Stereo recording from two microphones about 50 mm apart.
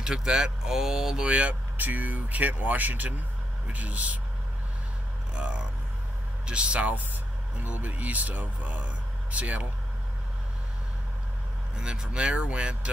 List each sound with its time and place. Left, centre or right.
0.0 s speech: centre
1.2 s speech: right
5.3 s speech: right
11.8 s speech: right